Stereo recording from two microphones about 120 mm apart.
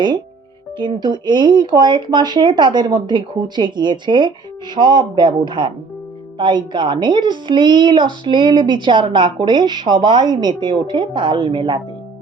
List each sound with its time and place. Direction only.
0.8 s a woman's voice: 40° right (ahead or behind)